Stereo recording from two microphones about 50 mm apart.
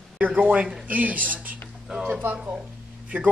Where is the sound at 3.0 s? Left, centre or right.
Right.